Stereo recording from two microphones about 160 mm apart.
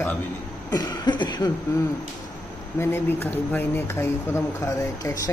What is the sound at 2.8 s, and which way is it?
Speech, 15° left (ahead or behind).